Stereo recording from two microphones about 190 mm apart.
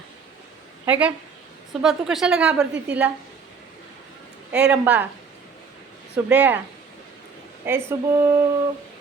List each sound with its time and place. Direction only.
0.9 s a woman's voice: 10° right (ahead or behind)
4.5 s speech: 5° right (ahead or behind)
6.2 s speech: 10° right (ahead or behind)
7.6 s speech: 15° right (ahead or behind)